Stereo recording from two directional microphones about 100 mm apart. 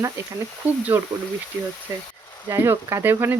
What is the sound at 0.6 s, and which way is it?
Speech, 15° right (ahead or behind).